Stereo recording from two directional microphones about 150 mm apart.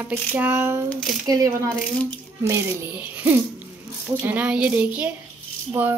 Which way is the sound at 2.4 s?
15° right (ahead or behind).